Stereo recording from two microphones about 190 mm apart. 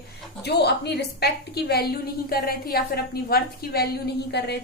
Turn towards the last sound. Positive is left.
turn(degrees=60)  # may be behind; listen again after turning